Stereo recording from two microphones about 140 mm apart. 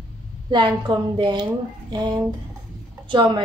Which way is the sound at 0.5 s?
35° right (ahead or behind).